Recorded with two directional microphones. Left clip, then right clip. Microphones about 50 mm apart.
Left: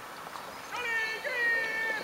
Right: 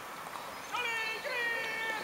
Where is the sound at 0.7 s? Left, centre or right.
Left.